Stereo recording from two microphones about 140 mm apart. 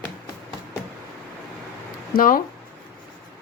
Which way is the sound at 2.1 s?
85° left.